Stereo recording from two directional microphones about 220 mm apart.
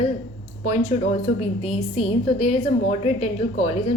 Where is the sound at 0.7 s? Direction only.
30° left (ahead or behind).